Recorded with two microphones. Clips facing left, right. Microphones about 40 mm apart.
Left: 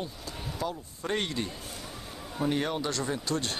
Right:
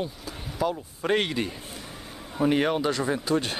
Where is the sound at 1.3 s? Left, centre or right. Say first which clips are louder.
Right 5 dB; right.